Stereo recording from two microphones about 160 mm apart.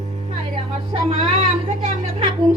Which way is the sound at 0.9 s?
45° right (ahead or behind).